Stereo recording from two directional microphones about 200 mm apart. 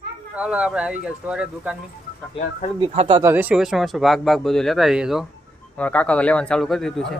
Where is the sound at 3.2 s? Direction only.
10° right (ahead or behind).